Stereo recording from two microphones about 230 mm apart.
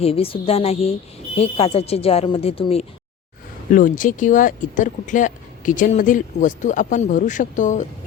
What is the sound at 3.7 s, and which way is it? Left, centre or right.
Speech, left.